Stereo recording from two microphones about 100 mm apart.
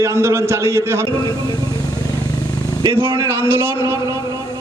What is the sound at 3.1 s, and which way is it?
A man's voice, 25° right (ahead or behind).